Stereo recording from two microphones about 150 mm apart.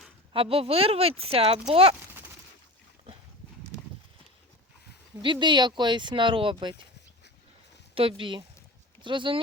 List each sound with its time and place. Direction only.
0.3 s speech: 40° right (ahead or behind)
5.2 s speech: 30° right (ahead or behind)
7.9 s speech: 35° right (ahead or behind)